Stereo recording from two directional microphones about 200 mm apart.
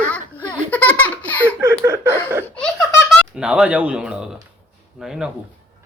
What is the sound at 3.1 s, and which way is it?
Speech, 5° right (ahead or behind).